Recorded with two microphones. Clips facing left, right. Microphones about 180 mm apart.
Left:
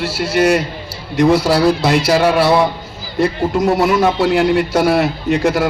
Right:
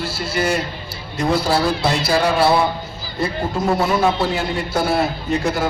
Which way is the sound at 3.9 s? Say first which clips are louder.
Left 5 dB; 75° left (ahead or behind).